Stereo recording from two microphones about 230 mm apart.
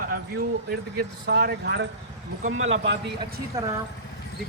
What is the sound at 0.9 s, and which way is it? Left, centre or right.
Speech, right.